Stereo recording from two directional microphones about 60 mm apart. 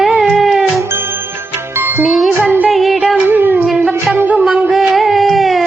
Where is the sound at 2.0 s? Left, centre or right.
Centre.